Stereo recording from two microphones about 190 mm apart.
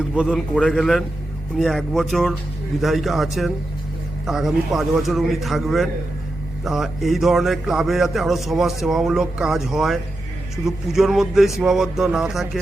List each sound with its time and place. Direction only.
0.2 s a man's voice: centre (ahead or behind)